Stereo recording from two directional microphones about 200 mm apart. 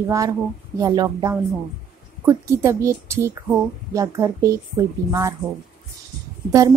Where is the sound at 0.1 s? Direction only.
15° right (ahead or behind).